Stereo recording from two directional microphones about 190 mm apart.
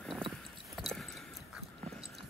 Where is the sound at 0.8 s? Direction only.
Centre (ahead or behind).